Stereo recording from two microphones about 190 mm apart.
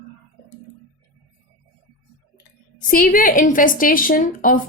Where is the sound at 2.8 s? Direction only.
45° left (ahead or behind).